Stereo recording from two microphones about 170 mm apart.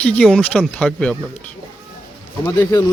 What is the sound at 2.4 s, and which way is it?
Speech, 20° left (ahead or behind).